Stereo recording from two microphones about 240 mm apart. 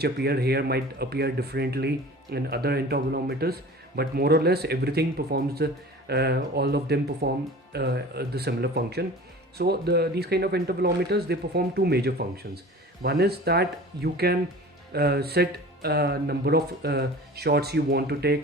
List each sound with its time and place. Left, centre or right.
0.0 s speech: right